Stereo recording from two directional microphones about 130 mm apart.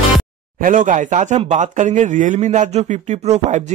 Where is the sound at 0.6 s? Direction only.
85° right.